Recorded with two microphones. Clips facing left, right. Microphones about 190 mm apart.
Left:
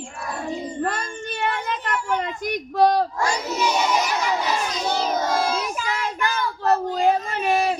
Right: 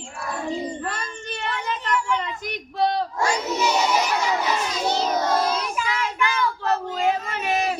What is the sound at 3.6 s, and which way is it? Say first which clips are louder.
Crowd: left 1 dB; 10° right (ahead or behind).